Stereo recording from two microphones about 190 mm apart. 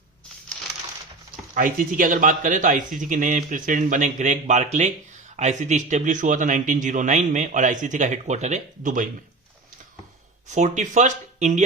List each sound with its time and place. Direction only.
1.5 s a man's voice: 45° right (ahead or behind)
10.5 s a man's voice: 40° right (ahead or behind)